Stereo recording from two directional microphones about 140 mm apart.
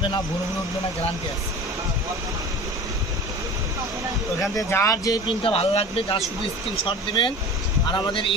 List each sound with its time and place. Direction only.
4.6 s speech: 20° left (ahead or behind)
5.4 s speech: 40° left (ahead or behind)